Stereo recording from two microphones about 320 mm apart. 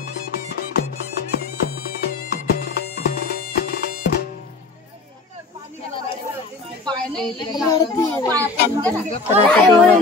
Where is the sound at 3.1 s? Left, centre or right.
Left.